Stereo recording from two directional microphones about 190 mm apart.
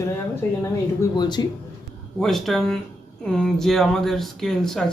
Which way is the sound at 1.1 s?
20° left (ahead or behind).